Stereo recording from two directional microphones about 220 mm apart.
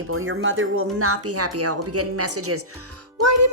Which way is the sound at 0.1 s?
70° right (ahead or behind).